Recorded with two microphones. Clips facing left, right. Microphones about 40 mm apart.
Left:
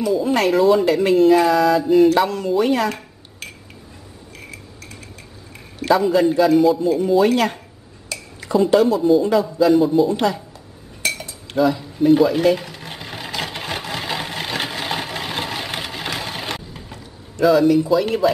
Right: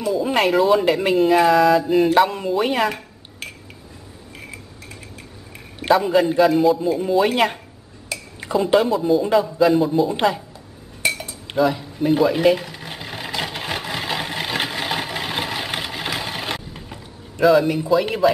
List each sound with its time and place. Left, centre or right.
0.0 s speech: centre
2.0 s speech: centre
6.0 s speech: centre
8.1 s a sound: centre
8.8 s speech: centre
10.1 s speech: centre
11.0 s cutlery: centre
11.7 s a sound: centre